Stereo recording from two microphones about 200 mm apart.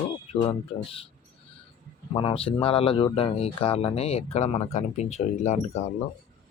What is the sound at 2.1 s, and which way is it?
Speech, 25° left (ahead or behind).